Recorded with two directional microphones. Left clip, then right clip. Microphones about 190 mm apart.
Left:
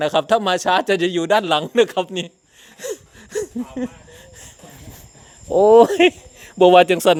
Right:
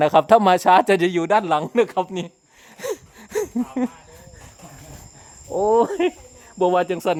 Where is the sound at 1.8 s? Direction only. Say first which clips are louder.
Left 3 dB; 5° right (ahead or behind).